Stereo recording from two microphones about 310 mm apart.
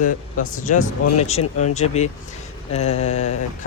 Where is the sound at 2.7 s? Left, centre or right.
Left.